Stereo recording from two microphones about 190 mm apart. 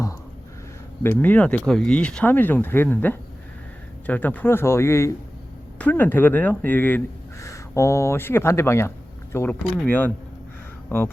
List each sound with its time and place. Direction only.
1.0 s speech: 10° left (ahead or behind)